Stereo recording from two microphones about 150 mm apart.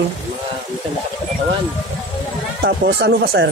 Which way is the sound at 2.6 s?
90° right.